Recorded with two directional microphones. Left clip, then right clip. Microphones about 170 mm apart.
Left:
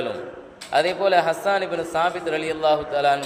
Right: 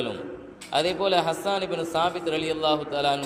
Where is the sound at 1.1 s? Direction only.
25° right (ahead or behind).